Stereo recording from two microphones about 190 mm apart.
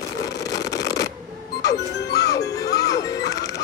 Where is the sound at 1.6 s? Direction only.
60° left (ahead or behind).